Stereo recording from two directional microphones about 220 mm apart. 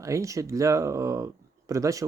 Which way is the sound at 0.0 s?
15° right (ahead or behind).